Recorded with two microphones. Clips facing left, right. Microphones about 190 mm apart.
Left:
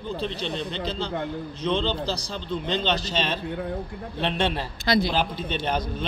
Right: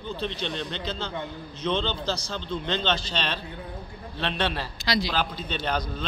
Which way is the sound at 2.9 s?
40° left (ahead or behind).